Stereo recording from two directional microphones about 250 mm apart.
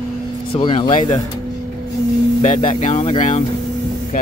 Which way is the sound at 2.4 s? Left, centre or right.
Left.